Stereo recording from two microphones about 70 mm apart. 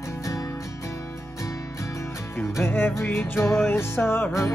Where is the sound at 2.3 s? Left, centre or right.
Left.